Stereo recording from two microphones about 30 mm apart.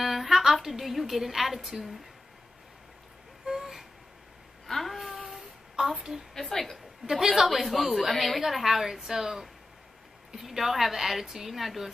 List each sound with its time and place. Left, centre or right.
0.0 s a sound: centre
0.4 s music: centre
0.7 s a woman's voice: centre
3.4 s a sound: centre
4.6 s a sound: centre
4.9 s child singing: centre
6.3 s a woman's voice: centre
7.1 s a woman's voice: centre
7.4 s a woman's voice: centre